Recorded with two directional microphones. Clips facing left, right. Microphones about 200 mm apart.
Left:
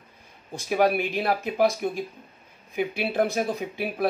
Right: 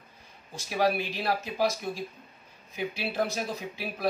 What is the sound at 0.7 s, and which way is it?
Speech, 55° left (ahead or behind).